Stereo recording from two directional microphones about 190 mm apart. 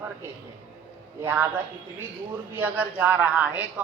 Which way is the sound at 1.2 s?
10° right (ahead or behind).